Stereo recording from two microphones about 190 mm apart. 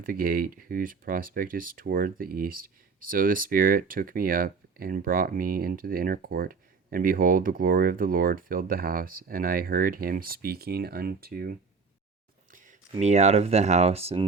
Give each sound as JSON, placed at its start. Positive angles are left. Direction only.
{"t": 0.0, "sound": "speech", "side_deg": -50}
{"t": 12.5, "sound": "a sound", "side_deg": -45}
{"t": 13.0, "sound": "speech", "side_deg": -35}